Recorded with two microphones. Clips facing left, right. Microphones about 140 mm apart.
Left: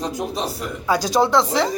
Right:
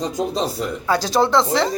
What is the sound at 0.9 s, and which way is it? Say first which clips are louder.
Speech: even; 10° left (ahead or behind).